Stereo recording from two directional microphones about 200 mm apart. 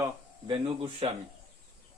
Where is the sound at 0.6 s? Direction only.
25° right (ahead or behind).